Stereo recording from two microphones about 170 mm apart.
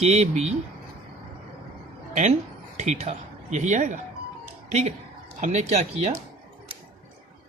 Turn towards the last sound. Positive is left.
turn(degrees=-40)  # may be behind; listen again after turning